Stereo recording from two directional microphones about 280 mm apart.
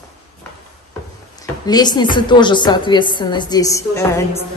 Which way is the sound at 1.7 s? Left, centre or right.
Centre.